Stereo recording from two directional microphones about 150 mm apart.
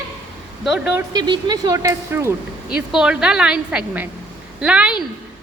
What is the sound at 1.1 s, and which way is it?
Speech, 30° right (ahead or behind).